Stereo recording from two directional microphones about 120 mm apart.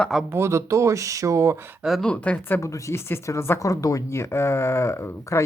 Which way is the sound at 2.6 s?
25° left (ahead or behind).